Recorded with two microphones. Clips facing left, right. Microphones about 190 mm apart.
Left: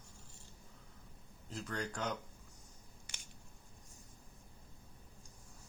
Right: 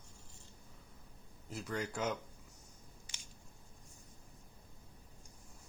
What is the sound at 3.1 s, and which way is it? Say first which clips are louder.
Scissors: left 2 dB; 65° left (ahead or behind).